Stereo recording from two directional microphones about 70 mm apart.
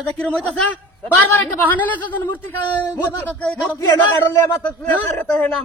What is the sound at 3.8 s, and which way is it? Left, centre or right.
Speech, left.